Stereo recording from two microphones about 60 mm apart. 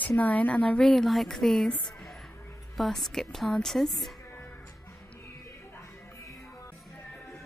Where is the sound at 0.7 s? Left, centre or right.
Centre.